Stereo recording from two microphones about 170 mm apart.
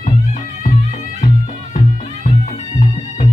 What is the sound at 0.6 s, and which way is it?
Music, 45° left (ahead or behind).